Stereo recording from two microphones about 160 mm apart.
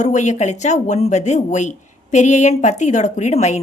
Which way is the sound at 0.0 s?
50° left (ahead or behind).